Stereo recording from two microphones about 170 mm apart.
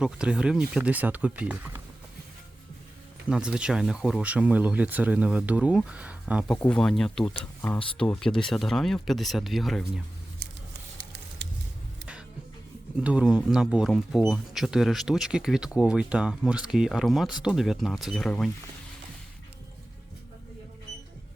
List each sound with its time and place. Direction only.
0.0 s speech: 5° right (ahead or behind)
3.2 s speech: 5° right (ahead or behind)
6.7 s speech: 5° left (ahead or behind)
11.4 s vehicle: 90° right
13.0 s speech: 5° right (ahead or behind)